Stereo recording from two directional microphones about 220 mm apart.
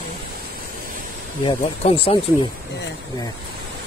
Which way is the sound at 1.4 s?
25° left (ahead or behind).